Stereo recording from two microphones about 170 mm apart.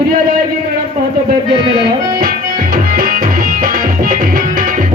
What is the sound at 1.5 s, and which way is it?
Music, 60° right (ahead or behind).